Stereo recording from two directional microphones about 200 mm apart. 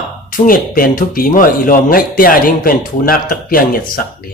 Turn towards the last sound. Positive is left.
turn(degrees=45)  # may be behind; listen again after turning